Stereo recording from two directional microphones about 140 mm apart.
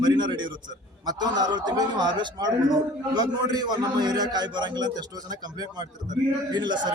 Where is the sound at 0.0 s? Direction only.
30° right (ahead or behind).